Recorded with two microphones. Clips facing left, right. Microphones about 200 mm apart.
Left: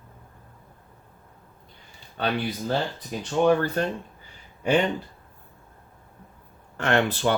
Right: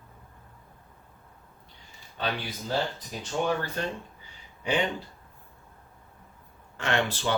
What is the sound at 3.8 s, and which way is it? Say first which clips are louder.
Speech: left 6 dB; 55° left (ahead or behind).